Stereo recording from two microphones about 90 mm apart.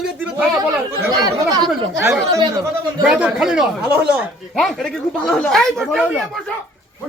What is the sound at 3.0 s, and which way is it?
Speech, 10° right (ahead or behind).